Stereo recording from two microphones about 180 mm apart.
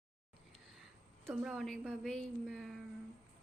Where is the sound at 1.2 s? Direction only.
Centre (ahead or behind).